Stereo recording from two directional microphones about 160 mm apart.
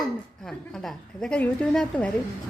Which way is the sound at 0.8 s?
5° left (ahead or behind).